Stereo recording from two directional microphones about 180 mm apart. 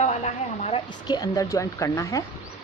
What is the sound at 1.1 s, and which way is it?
Speech, 20° left (ahead or behind).